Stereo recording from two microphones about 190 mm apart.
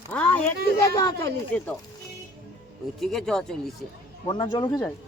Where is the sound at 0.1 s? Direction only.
5° left (ahead or behind).